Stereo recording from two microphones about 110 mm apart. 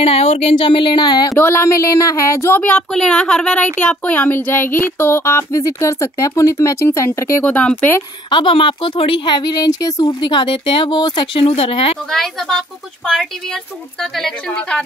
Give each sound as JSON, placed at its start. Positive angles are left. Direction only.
{"t": 0.0, "sound": "a woman's voice", "side_deg": 70}
{"t": 1.4, "sound": "speech", "side_deg": 20}
{"t": 7.4, "sound": "speech", "side_deg": 10}
{"t": 8.3, "sound": "a woman's voice", "side_deg": 50}
{"t": 10.2, "sound": "a woman's voice", "side_deg": 45}
{"t": 11.4, "sound": "speech", "side_deg": 60}
{"t": 12.1, "sound": "a woman's voice", "side_deg": 5}